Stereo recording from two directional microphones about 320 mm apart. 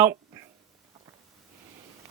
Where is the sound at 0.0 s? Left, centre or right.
Centre.